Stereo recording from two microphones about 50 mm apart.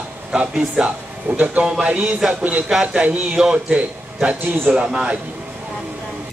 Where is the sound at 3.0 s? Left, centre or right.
Right.